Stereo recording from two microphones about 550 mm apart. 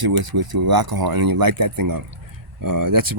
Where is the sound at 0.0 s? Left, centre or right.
Right.